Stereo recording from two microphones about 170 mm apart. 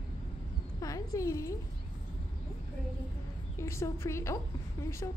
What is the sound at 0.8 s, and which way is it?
Speech, 20° left (ahead or behind).